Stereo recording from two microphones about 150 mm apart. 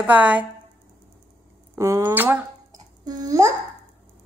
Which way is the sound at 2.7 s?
25° right (ahead or behind).